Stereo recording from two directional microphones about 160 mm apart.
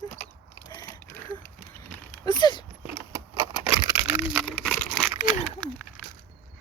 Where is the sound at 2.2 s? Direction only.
30° left (ahead or behind).